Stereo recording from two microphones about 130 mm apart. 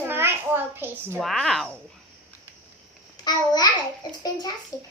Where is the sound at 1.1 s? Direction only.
Centre (ahead or behind).